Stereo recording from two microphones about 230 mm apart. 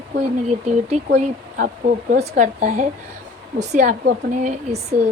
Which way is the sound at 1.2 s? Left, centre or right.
Right.